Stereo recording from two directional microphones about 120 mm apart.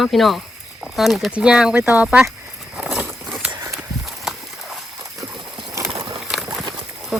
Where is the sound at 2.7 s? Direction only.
5° right (ahead or behind).